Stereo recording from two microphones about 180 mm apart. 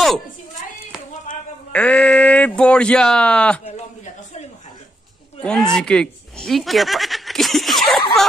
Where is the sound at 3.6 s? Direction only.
40° left (ahead or behind).